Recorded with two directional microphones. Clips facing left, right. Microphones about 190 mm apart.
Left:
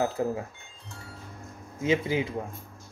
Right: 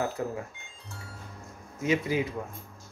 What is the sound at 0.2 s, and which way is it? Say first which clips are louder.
Speech: left 5 dB; 25° left (ahead or behind).